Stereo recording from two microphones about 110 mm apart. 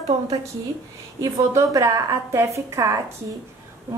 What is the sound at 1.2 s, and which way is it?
A woman's voice, 30° right (ahead or behind).